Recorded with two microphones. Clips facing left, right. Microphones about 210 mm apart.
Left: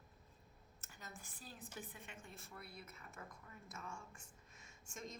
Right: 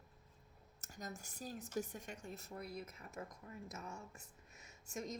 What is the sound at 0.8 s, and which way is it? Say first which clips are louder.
A woman's voice: right 8 dB; 40° right (ahead or behind).